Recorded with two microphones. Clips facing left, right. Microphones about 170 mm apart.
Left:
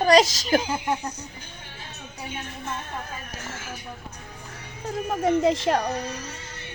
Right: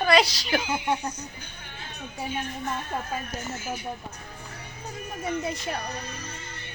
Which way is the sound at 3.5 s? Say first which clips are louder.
Right 4 dB; 90° left.